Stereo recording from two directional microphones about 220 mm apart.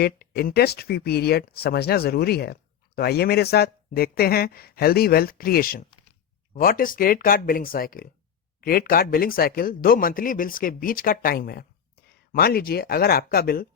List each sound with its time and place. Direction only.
0.0 s speech: 45° left (ahead or behind)